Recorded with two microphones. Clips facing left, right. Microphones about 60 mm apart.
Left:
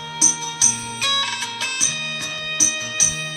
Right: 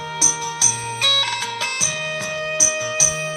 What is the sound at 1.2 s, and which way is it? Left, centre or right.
Music, right.